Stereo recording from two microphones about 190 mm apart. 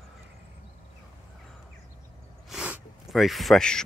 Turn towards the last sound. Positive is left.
turn(degrees=5)  # may be behind; listen again after turning